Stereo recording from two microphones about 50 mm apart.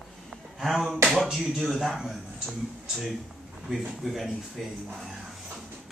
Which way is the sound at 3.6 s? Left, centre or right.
Centre.